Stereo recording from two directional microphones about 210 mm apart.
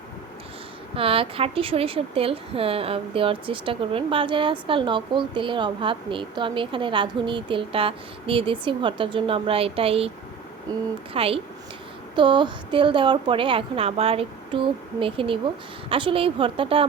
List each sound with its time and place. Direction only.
0.9 s a woman's voice: 25° right (ahead or behind)